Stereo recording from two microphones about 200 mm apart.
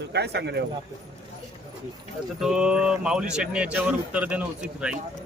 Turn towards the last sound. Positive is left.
turn(degrees=-5)  # may be behind; listen again after turning